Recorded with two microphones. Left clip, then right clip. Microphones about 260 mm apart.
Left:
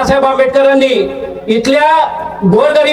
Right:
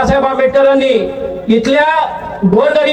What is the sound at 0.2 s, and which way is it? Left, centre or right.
Speech, left.